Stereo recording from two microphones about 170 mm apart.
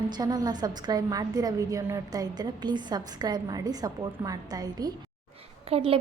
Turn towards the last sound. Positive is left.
turn(degrees=-35)  # may be behind; listen again after turning